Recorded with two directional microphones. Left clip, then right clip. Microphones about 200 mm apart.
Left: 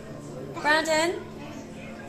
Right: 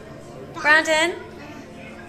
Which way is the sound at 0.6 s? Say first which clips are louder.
Right 6 dB; 15° right (ahead or behind).